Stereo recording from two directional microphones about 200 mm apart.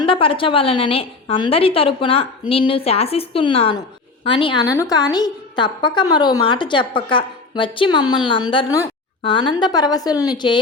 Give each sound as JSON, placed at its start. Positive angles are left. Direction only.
{"t": 0.0, "sound": "a woman's voice", "side_deg": 25}